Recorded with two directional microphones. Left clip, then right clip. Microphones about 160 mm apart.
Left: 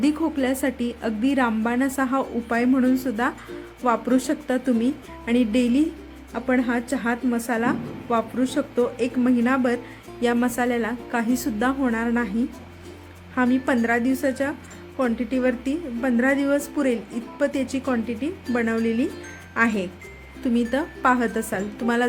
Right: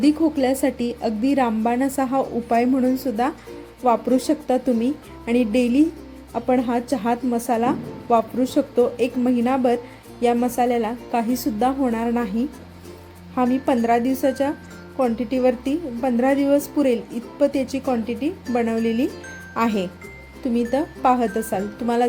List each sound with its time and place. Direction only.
0.0 s a woman's voice: 15° right (ahead or behind)
13.3 s a woman's voice: 15° right (ahead or behind)
20.4 s a woman's voice: 10° right (ahead or behind)